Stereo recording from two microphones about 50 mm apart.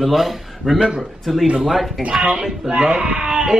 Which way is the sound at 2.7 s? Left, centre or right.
Right.